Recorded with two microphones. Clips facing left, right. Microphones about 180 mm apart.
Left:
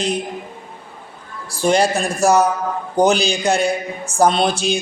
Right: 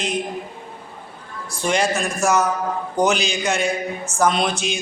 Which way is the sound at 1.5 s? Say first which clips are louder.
Left 5 dB; 35° left (ahead or behind).